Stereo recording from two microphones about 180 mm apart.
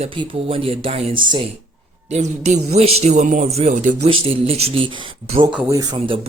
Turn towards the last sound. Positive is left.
turn(degrees=-20)  # may be behind; listen again after turning